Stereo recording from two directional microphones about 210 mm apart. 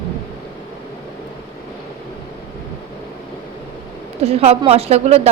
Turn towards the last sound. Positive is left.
turn(degrees=-30)  # may be behind; listen again after turning